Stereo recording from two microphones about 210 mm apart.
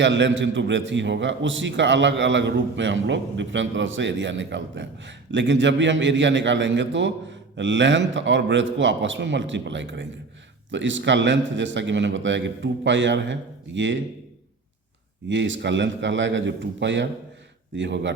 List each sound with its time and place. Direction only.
0.0 s a man's voice: 60° right (ahead or behind)
15.3 s a man's voice: 60° right (ahead or behind)